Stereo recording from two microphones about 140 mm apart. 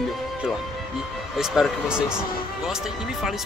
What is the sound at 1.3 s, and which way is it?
Speech, centre (ahead or behind).